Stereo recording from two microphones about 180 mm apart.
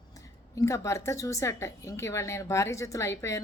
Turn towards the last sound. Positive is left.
turn(degrees=15)  # may be behind; listen again after turning